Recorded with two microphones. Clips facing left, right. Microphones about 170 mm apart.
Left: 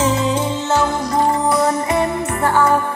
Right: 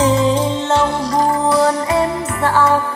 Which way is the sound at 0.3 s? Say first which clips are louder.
Right 2 dB; 30° right (ahead or behind).